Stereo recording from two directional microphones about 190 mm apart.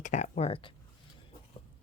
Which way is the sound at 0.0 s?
40° left (ahead or behind).